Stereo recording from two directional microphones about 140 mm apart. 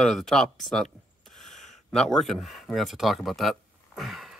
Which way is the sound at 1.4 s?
Centre (ahead or behind).